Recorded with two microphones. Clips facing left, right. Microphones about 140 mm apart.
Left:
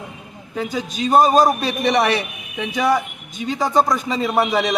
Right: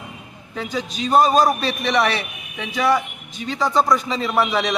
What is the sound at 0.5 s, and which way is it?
A man's voice, 10° left (ahead or behind).